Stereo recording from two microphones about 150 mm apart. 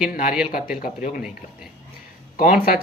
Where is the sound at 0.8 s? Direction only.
65° left (ahead or behind).